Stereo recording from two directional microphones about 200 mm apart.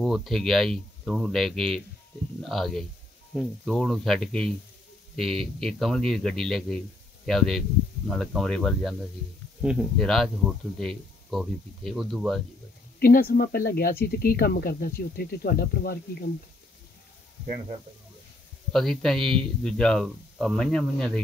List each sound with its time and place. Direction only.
0.0 s speech: centre (ahead or behind)
13.0 s speech: 50° left (ahead or behind)
18.7 s speech: centre (ahead or behind)